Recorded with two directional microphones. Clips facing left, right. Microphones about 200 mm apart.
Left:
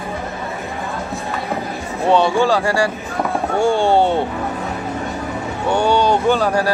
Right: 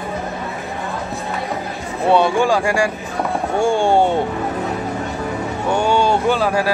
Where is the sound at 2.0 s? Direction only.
10° right (ahead or behind).